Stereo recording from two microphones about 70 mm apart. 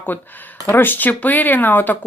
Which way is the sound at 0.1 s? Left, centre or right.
Left.